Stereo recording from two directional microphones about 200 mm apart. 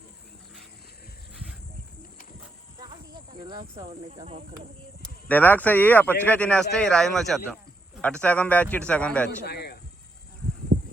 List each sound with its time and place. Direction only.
3.4 s speech: 20° right (ahead or behind)
5.3 s speech: 10° left (ahead or behind)
9.5 s a sound: 55° left (ahead or behind)